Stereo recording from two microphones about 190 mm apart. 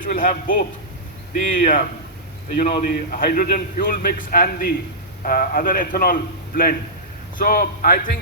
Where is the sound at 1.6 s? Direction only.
45° left (ahead or behind).